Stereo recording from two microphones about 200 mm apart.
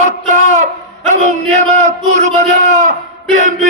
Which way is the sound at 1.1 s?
35° right (ahead or behind).